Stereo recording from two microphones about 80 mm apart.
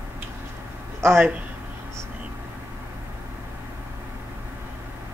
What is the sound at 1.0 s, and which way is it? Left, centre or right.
Speech, right.